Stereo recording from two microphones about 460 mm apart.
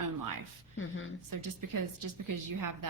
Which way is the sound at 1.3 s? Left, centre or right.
Right.